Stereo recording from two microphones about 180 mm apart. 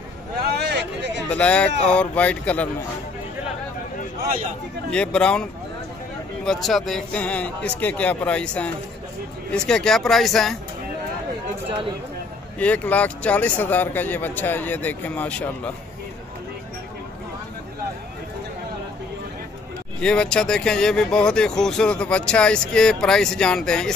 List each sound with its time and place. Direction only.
0.6 s vehicle: 65° right (ahead or behind)
1.3 s speech: 5° left (ahead or behind)
4.9 s speech: 5° left (ahead or behind)
12.5 s speech: 10° left (ahead or behind)
20.0 s speech: 5° left (ahead or behind)